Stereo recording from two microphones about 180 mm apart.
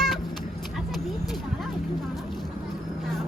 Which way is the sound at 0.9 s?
Centre (ahead or behind).